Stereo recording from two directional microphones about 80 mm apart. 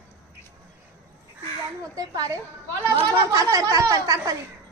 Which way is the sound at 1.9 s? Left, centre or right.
Right.